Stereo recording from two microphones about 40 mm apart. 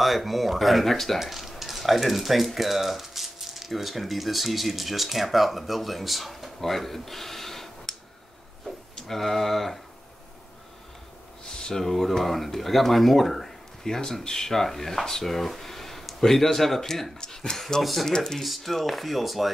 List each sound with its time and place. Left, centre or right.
0.0 s speech: centre
8.9 s speech: centre
11.4 s speech: centre
18.4 s speech: centre